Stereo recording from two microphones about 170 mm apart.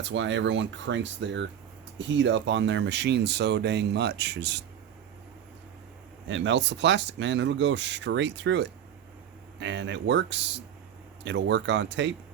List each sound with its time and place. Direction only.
0.0 s speech: 90° right
6.2 s speech: 90° right